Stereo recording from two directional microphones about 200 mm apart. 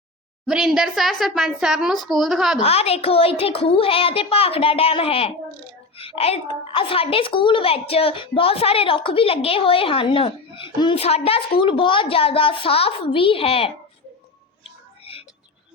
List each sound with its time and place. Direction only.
0.4 s a woman's voice: centre (ahead or behind)
2.6 s a woman's voice: 30° left (ahead or behind)